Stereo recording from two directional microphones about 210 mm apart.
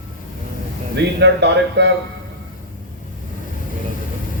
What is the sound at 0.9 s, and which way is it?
Speech, 55° right (ahead or behind).